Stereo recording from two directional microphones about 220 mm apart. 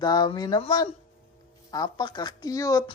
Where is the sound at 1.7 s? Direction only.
20° left (ahead or behind).